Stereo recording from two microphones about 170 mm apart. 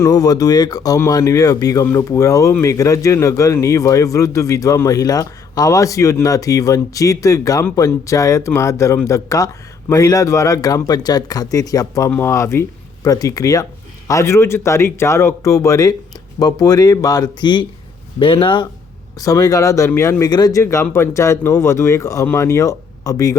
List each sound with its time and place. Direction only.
0.0 s speech: 20° left (ahead or behind)